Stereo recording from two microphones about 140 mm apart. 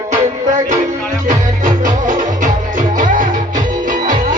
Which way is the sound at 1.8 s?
65° right (ahead or behind).